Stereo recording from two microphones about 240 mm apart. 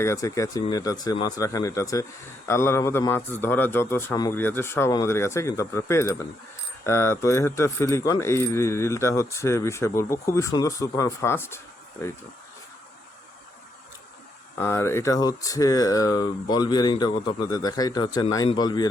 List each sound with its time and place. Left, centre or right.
0.0 s mechanisms: centre
14.6 s mechanisms: centre